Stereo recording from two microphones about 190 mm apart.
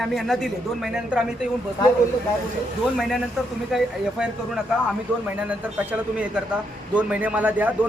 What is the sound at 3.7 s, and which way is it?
A man's voice, centre (ahead or behind).